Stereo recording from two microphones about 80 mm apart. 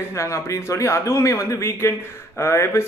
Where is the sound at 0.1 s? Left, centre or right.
Left.